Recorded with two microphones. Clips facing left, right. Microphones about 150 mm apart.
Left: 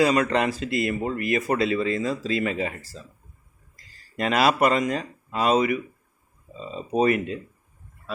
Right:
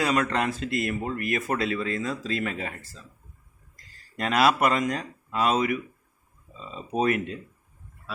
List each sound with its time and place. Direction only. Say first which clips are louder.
0.0 s speech: left 4 dB; centre (ahead or behind)